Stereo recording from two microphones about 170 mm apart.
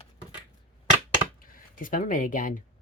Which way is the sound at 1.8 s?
55° left (ahead or behind).